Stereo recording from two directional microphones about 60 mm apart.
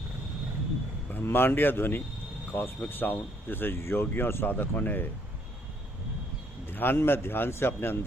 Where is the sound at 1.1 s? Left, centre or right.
Left.